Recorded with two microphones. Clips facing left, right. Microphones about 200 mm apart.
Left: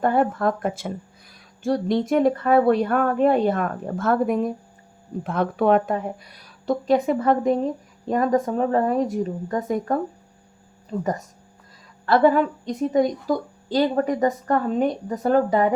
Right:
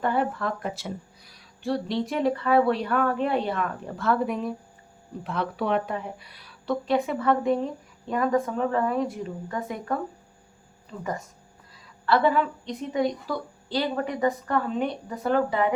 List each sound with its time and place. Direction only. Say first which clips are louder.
0.0 s a woman's voice: left 6 dB; 45° left (ahead or behind)